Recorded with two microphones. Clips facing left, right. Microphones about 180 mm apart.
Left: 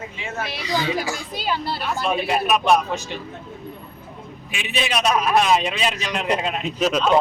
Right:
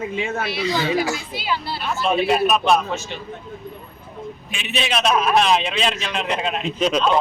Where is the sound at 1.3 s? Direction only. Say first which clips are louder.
Left 1 dB; 45° left (ahead or behind).